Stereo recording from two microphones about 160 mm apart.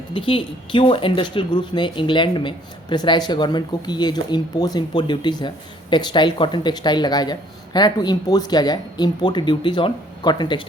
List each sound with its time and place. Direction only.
0.1 s speech: 30° left (ahead or behind)